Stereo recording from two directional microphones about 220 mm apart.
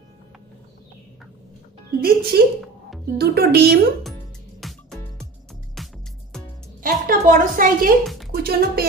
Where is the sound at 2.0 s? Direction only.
45° right (ahead or behind).